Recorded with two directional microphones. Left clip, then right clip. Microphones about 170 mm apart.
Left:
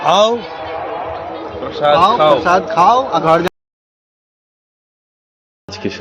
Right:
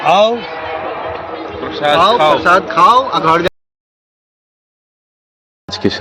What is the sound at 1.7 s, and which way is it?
Speech, 90° left.